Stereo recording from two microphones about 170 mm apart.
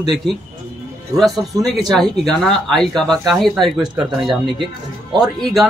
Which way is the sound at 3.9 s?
25° right (ahead or behind).